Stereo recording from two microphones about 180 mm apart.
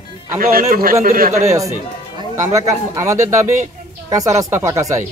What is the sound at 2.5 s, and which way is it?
Speech, 15° right (ahead or behind).